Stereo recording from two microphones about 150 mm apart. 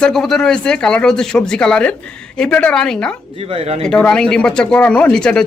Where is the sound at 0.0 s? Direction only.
5° left (ahead or behind).